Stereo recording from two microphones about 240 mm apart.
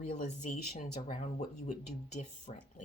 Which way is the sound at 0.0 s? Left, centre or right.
Left.